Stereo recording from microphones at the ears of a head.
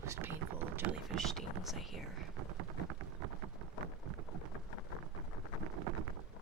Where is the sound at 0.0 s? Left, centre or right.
Right.